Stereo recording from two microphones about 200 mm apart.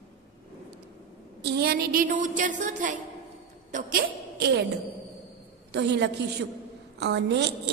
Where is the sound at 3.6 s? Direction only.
40° right (ahead or behind).